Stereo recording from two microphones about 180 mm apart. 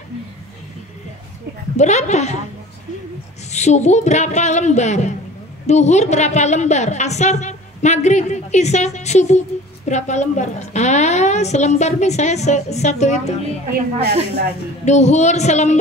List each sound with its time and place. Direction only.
1.8 s a woman's voice: 40° left (ahead or behind)
3.5 s a woman's voice: 40° left (ahead or behind)
14.9 s a woman's voice: 40° left (ahead or behind)